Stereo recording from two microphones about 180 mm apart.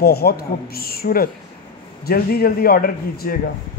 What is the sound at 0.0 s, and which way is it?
Speech, 60° left (ahead or behind).